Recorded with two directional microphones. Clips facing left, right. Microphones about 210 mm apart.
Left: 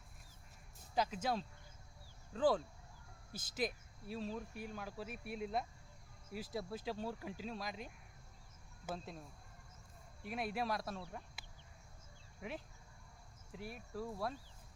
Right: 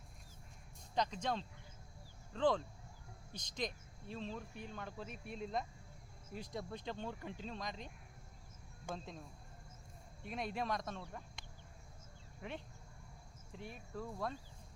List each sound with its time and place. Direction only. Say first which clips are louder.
0.9 s speech: left 1 dB; 5° left (ahead or behind)
10.2 s speech: left 1 dB; 5° left (ahead or behind)